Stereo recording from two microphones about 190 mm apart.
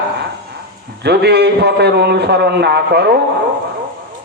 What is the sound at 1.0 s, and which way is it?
A man's voice, 60° right (ahead or behind).